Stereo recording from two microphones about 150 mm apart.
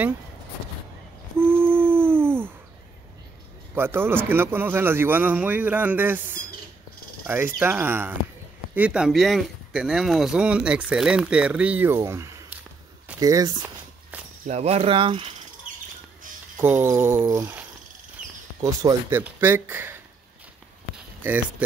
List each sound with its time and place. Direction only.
1.4 s owl: 15° right (ahead or behind)
3.7 s speech: 15° right (ahead or behind)
14.5 s speech: 45° right (ahead or behind)
16.5 s speech: 15° right (ahead or behind)
18.2 s a sound: 60° right (ahead or behind)
18.6 s speech: 25° right (ahead or behind)
19.0 s speech: 15° right (ahead or behind)
20.9 s a sound: 10° right (ahead or behind)